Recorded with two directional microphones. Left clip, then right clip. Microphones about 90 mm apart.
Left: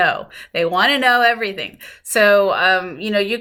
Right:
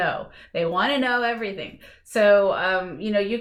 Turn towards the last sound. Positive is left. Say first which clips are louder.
# left 5 dB
turn(degrees=25)  # may be behind; listen again after turning